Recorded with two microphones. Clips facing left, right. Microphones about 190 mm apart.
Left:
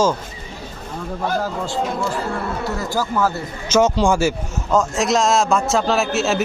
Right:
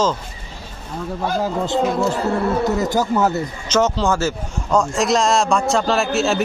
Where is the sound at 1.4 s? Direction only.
20° right (ahead or behind).